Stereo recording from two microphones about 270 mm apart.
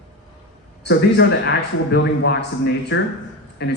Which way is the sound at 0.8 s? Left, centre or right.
Left.